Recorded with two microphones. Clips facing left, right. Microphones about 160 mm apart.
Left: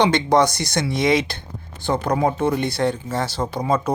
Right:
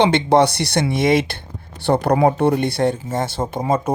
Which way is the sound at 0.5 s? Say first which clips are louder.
Right 3 dB; 60° right (ahead or behind).